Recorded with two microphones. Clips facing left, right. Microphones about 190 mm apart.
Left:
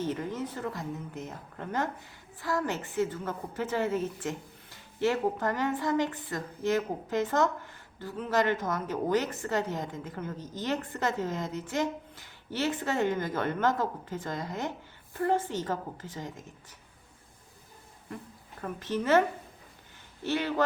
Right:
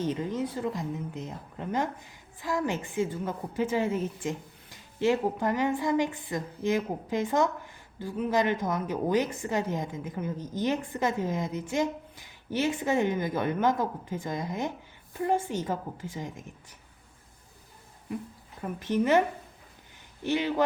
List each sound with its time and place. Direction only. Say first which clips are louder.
0.0 s a woman's voice: right 3 dB; 15° right (ahead or behind)
18.6 s a woman's voice: right 4 dB; 15° right (ahead or behind)
20.2 s a woman's voice: right 2 dB; 15° right (ahead or behind)